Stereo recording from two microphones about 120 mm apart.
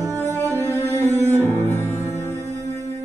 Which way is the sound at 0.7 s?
25° left (ahead or behind).